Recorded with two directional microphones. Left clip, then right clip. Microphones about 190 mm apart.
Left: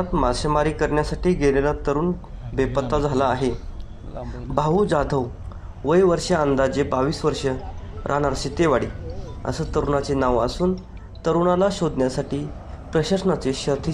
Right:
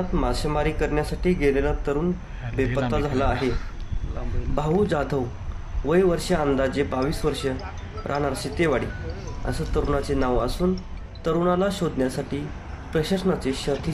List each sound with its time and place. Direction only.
0.1 s speech: 5° left (ahead or behind)
4.6 s speech: centre (ahead or behind)